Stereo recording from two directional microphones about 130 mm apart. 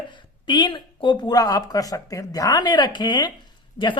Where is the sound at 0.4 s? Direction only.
35° left (ahead or behind).